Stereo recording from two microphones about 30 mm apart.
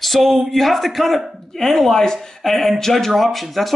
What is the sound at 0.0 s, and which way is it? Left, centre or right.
Speech, centre.